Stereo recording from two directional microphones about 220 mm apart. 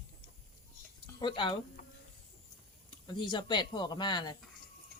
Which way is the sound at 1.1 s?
20° left (ahead or behind).